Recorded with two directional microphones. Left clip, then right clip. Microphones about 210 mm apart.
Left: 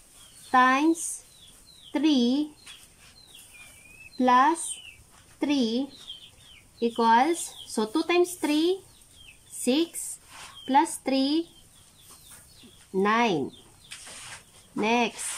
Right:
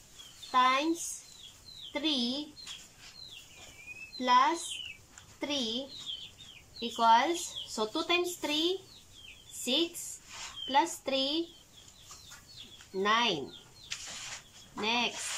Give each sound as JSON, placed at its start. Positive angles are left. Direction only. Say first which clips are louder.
{"t": 0.5, "sound": "speech", "louder": "left 6 dB", "side_deg": 30}
{"t": 1.9, "sound": "speech", "louder": "left 8 dB", "side_deg": 30}
{"t": 4.2, "sound": "speech", "louder": "left 5 dB", "side_deg": 30}
{"t": 6.8, "sound": "speech", "louder": "left 4 dB", "side_deg": 25}
{"t": 10.7, "sound": "speech", "louder": "left 6 dB", "side_deg": 25}
{"t": 13.0, "sound": "speech", "louder": "left 4 dB", "side_deg": 25}
{"t": 14.8, "sound": "speech", "louder": "left 6 dB", "side_deg": 25}